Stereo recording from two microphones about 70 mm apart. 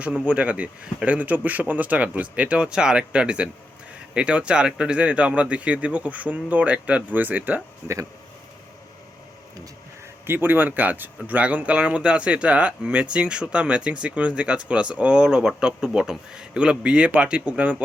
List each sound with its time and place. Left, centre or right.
0.0 s a man's voice: centre
10.2 s speech: right